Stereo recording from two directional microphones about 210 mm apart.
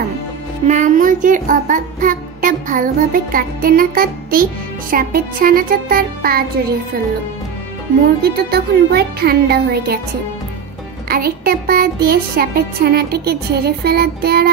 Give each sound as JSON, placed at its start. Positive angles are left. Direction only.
{"t": 0.7, "sound": "child singing", "side_deg": -35}
{"t": 4.9, "sound": "music", "side_deg": -45}
{"t": 8.2, "sound": "music", "side_deg": -50}
{"t": 11.1, "sound": "music", "side_deg": -45}